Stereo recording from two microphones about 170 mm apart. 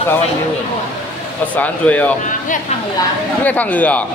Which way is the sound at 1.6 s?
10° left (ahead or behind).